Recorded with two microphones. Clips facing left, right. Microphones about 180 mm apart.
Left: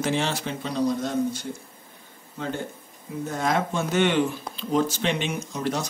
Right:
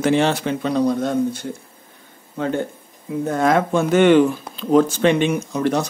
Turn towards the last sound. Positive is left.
turn(degrees=-60)  # may be behind; listen again after turning